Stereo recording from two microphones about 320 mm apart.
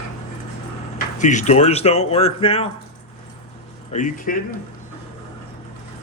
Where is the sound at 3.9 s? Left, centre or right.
Left.